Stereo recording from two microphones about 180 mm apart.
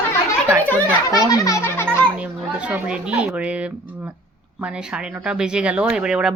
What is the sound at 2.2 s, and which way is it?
A woman's voice, 5° right (ahead or behind).